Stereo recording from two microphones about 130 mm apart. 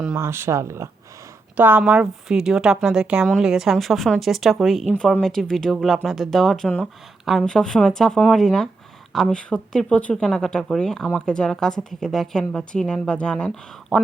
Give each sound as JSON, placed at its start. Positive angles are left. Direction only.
{"t": 0.2, "sound": "a woman's voice", "side_deg": -20}